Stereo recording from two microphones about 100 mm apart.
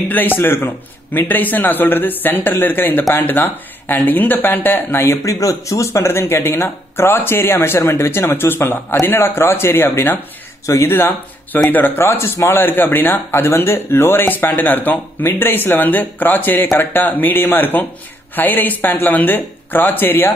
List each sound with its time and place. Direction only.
0.1 s speech: 20° left (ahead or behind)